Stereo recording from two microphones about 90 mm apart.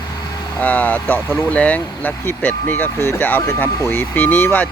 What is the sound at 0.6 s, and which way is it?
Speech, 20° left (ahead or behind).